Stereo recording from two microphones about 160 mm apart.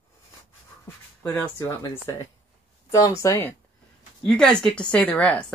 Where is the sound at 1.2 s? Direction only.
15° left (ahead or behind).